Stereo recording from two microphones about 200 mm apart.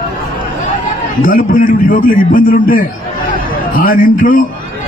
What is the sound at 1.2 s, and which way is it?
A man's voice, 40° left (ahead or behind).